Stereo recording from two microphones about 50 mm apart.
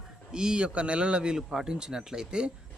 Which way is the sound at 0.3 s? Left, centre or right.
Centre.